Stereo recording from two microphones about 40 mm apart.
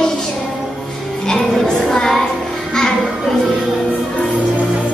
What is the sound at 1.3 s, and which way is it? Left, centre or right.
Music, centre.